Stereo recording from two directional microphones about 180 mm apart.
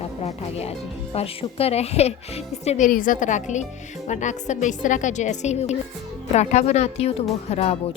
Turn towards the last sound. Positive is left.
turn(degrees=35)  # may be behind; listen again after turning